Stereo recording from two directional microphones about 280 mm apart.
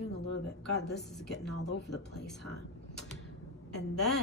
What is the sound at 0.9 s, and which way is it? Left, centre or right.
A woman's voice, centre.